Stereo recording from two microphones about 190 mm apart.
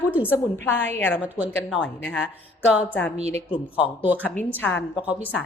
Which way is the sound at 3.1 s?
35° right (ahead or behind).